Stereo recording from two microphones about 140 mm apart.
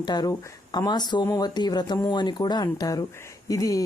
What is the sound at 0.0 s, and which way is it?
Speech, 30° left (ahead or behind).